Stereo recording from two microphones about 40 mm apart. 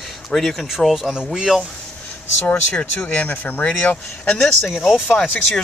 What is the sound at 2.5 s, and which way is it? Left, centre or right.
Speech, left.